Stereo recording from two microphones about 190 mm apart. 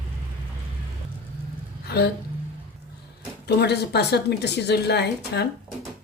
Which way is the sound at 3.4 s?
60° left (ahead or behind).